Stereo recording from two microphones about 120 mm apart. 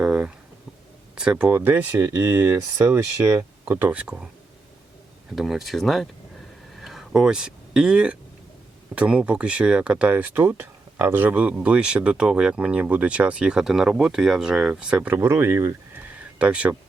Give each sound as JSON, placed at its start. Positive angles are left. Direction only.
{"t": 0.0, "sound": "a sound", "side_deg": -10}
{"t": 1.1, "sound": "speech", "side_deg": -5}
{"t": 5.3, "sound": "speech", "side_deg": 0}
{"t": 6.7, "sound": "a sound", "side_deg": 0}
{"t": 9.0, "sound": "speech", "side_deg": -10}
{"t": 16.4, "sound": "speech", "side_deg": -10}